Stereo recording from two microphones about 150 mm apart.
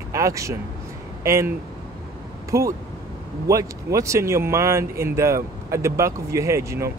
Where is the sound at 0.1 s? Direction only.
20° right (ahead or behind).